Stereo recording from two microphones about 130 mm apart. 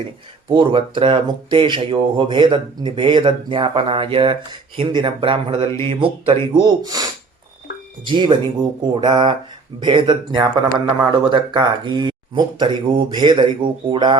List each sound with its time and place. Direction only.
0.4 s speech: 40° right (ahead or behind)
8.0 s speech: 40° right (ahead or behind)